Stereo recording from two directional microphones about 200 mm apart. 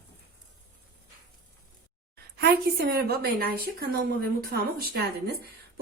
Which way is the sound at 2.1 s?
55° right (ahead or behind).